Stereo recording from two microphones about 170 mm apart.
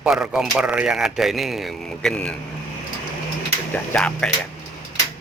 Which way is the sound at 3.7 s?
5° left (ahead or behind).